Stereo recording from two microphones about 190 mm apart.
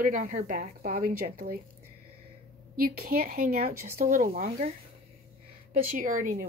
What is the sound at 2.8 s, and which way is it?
A woman's voice, 50° right (ahead or behind).